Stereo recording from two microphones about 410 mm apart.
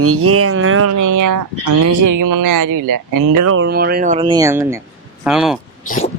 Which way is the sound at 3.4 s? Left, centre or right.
Right.